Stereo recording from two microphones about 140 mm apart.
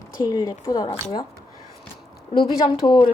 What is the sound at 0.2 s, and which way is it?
Speech, 25° left (ahead or behind).